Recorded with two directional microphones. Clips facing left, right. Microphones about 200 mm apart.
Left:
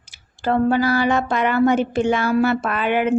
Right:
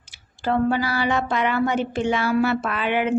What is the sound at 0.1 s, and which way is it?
A woman's voice, 45° left (ahead or behind).